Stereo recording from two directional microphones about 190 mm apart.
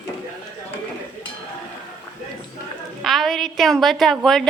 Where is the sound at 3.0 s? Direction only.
Centre (ahead or behind).